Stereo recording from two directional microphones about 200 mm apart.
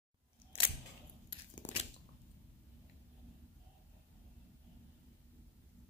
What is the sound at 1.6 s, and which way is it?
Biting, 35° left (ahead or behind).